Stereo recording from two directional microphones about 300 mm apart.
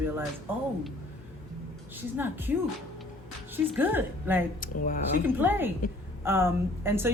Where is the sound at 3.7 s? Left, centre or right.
Centre.